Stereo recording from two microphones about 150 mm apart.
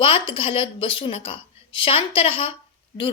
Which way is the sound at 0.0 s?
35° left (ahead or behind).